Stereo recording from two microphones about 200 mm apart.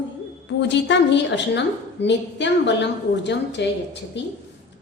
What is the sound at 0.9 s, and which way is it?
A woman's voice, 60° left (ahead or behind).